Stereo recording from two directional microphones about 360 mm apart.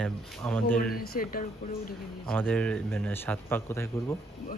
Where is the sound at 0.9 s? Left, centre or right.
Left.